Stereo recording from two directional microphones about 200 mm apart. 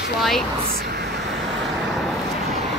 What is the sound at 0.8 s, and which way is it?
Vehicle, 55° right (ahead or behind).